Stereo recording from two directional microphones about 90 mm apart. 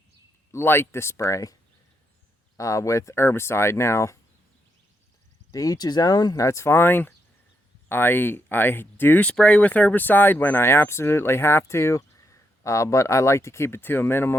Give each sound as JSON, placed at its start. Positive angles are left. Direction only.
{"t": 0.5, "sound": "speech", "side_deg": 25}
{"t": 2.6, "sound": "speech", "side_deg": 35}
{"t": 5.5, "sound": "speech", "side_deg": 45}